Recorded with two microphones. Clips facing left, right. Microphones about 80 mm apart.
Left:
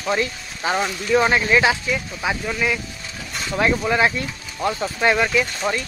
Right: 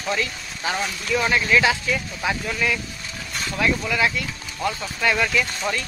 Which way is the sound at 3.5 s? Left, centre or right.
Left.